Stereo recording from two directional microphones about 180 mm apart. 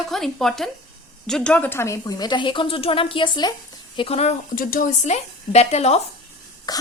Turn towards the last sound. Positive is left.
turn(degrees=20)  # may be behind; listen again after turning